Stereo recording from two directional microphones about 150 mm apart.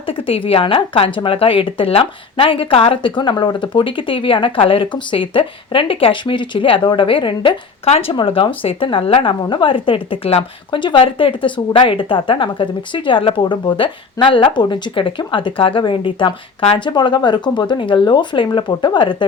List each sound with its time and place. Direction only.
0.0 s a woman's voice: 35° left (ahead or behind)